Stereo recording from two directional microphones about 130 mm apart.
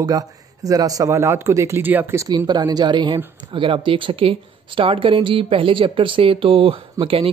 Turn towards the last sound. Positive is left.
turn(degrees=-45)  # may be behind; listen again after turning